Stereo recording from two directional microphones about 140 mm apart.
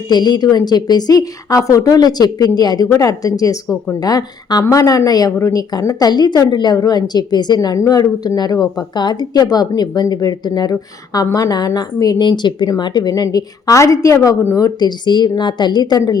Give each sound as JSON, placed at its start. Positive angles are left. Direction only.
{"t": 0.1, "sound": "a woman's voice", "side_deg": 30}